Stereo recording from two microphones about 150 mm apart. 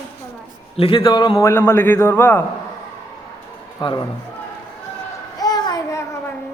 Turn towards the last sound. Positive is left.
turn(degrees=25)  # may be behind; listen again after turning